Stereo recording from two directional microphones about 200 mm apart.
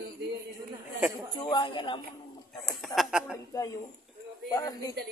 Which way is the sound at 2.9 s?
5° right (ahead or behind).